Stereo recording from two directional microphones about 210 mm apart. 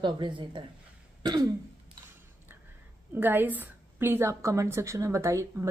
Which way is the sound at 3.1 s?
10° right (ahead or behind).